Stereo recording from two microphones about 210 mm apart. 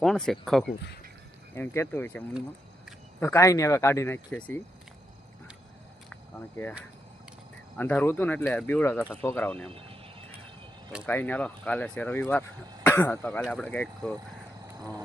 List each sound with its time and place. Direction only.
0.0 s speech: centre (ahead or behind)
7.8 s speech: 10° left (ahead or behind)
9.6 s a sound: 25° right (ahead or behind)
11.0 s speech: 10° left (ahead or behind)